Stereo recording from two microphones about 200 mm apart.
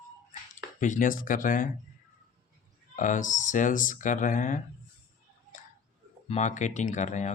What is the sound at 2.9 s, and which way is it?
Speech, 40° left (ahead or behind).